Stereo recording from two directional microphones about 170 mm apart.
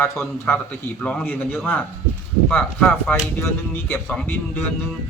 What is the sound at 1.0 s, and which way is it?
Speech, 10° left (ahead or behind).